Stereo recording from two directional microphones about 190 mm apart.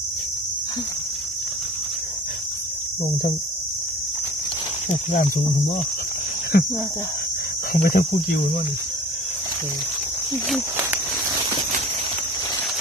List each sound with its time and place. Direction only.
4.8 s speech: 40° left (ahead or behind)
7.7 s speech: 50° left (ahead or behind)